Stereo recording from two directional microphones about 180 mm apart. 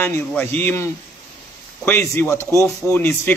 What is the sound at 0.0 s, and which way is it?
Speech, 10° left (ahead or behind).